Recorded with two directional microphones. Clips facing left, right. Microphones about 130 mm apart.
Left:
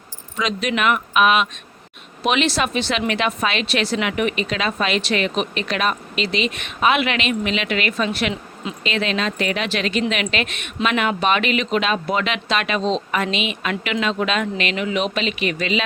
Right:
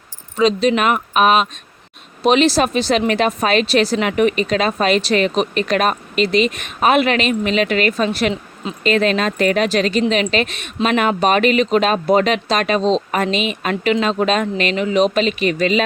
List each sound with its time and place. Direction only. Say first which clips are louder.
0.3 s a woman's voice: right 8 dB; 30° right (ahead or behind)